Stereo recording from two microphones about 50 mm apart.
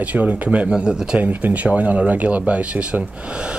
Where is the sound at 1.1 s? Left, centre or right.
Right.